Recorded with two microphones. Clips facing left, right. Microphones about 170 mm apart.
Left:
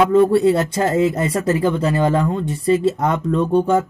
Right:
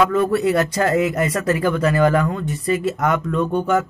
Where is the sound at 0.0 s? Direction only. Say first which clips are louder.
Left 4 dB; 30° left (ahead or behind).